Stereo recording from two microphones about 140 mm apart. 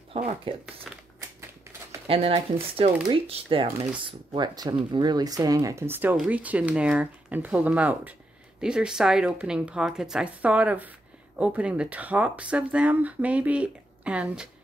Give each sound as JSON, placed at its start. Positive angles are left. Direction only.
{"t": 0.1, "sound": "speech", "side_deg": -45}
{"t": 2.0, "sound": "speech", "side_deg": -45}